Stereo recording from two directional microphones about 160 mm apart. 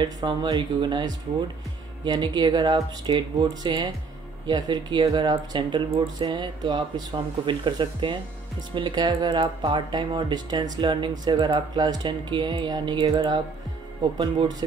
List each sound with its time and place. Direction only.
0.0 s speech: 30° right (ahead or behind)